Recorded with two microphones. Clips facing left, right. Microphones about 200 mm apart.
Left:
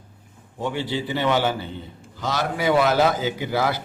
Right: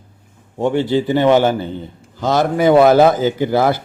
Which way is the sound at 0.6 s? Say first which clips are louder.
Right 10 dB; 50° right (ahead or behind).